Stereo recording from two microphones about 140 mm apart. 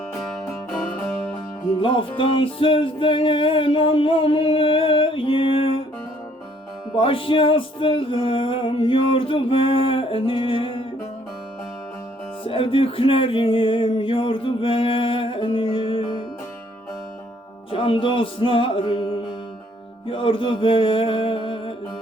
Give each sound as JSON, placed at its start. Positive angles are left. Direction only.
{"t": 1.8, "sound": "music", "side_deg": 40}
{"t": 6.9, "sound": "music", "side_deg": 40}
{"t": 12.5, "sound": "music", "side_deg": 40}
{"t": 17.7, "sound": "music", "side_deg": 40}
{"t": 20.1, "sound": "music", "side_deg": 40}